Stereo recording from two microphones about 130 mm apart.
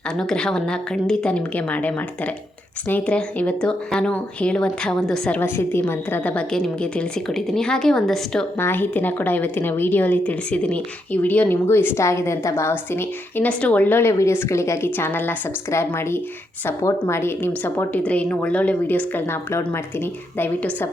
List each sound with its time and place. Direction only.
0.2 s a woman's voice: 5° left (ahead or behind)
5.4 s a woman's voice: 15° left (ahead or behind)
8.5 s a woman's voice: 15° left (ahead or behind)